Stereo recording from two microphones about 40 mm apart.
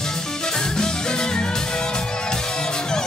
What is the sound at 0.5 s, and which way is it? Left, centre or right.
Music, centre.